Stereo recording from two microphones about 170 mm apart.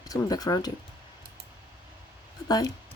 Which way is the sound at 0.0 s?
20° left (ahead or behind).